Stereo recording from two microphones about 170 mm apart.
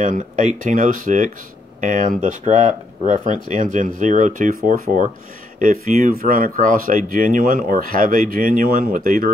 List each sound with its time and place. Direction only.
0.0 s speech: 45° right (ahead or behind)